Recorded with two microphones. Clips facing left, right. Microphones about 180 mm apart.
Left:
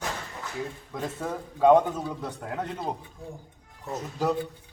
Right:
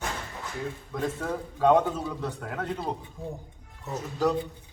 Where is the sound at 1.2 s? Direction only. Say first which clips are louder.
Left 4 dB; 10° left (ahead or behind).